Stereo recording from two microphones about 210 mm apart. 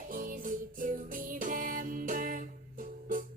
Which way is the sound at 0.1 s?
40° right (ahead or behind).